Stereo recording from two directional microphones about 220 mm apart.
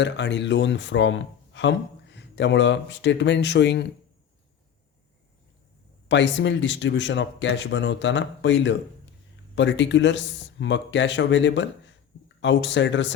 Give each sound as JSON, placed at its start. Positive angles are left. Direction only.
{"t": 0.0, "sound": "speech", "side_deg": 55}
{"t": 6.1, "sound": "speech", "side_deg": 55}